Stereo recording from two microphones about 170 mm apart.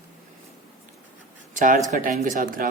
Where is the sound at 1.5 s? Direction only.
45° right (ahead or behind).